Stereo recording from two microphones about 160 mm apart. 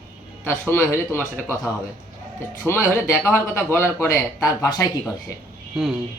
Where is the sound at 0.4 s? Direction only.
10° left (ahead or behind).